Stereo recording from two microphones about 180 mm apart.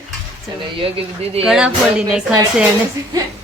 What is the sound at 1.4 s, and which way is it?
Speech, 5° right (ahead or behind).